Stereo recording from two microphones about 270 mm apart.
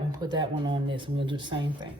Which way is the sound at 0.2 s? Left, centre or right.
Centre.